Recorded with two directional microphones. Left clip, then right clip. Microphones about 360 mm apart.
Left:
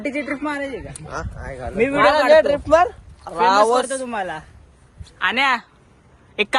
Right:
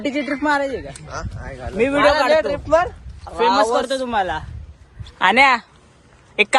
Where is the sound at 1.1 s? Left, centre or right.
Left.